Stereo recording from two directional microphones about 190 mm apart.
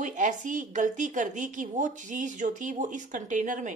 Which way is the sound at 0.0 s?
40° right (ahead or behind).